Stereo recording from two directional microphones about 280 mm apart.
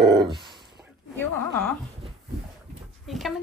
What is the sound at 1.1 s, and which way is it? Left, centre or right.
Speech, centre.